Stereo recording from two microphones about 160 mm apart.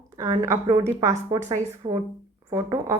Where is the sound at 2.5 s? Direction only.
20° right (ahead or behind).